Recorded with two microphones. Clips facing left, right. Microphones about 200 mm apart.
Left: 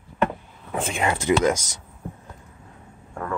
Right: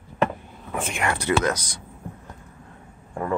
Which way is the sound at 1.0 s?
20° left (ahead or behind).